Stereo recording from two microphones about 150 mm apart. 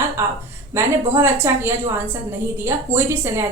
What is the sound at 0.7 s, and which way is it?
A woman's voice, 15° right (ahead or behind).